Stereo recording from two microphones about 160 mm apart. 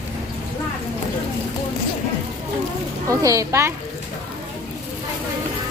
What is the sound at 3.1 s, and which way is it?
Speech, 20° right (ahead or behind).